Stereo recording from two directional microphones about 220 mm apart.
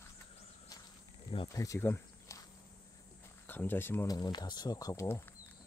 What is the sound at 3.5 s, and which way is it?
Speech, 10° left (ahead or behind).